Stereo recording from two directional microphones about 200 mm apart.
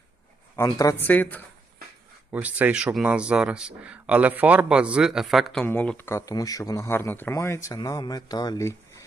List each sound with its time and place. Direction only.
0.5 s speech: 15° left (ahead or behind)
2.3 s speech: 5° right (ahead or behind); by 9.0 s 15° left (ahead or behind)